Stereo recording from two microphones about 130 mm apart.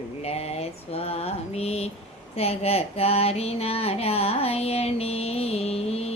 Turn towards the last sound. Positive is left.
turn(degrees=50)  # may be behind; listen again after turning